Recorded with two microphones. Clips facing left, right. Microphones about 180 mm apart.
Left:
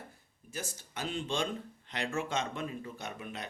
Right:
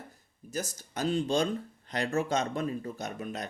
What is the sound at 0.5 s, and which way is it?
Speech, 40° right (ahead or behind).